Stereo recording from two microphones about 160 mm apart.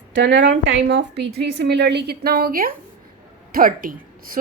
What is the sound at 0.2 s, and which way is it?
A woman's voice, 90° right.